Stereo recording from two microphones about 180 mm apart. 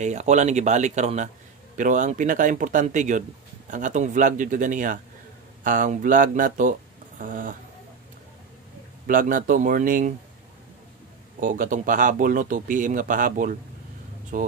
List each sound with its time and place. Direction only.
0.0 s speech: 40° right (ahead or behind)
9.0 s speech: 50° right (ahead or behind)
11.3 s speech: 50° right (ahead or behind)